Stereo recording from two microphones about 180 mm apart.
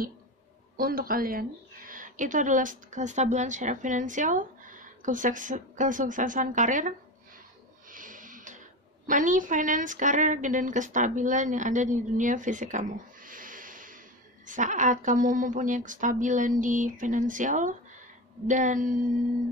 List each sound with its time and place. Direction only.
0.7 s a woman's voice: 55° right (ahead or behind)
7.9 s a sound: 45° right (ahead or behind)
9.0 s speech: 45° right (ahead or behind)